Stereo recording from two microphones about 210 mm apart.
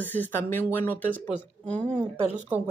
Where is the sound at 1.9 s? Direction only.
30° right (ahead or behind).